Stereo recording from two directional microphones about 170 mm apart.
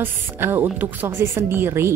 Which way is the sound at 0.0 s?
15° right (ahead or behind).